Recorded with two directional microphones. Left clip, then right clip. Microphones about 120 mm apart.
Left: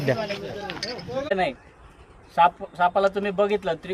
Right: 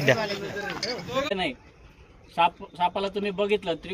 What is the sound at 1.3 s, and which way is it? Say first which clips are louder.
Speech: left 5 dB; 30° left (ahead or behind).